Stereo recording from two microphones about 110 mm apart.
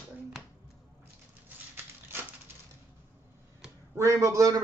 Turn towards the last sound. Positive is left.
turn(degrees=-30)  # may be behind; listen again after turning